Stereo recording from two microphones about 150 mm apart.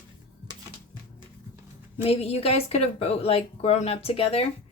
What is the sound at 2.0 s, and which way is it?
Speech, 40° left (ahead or behind).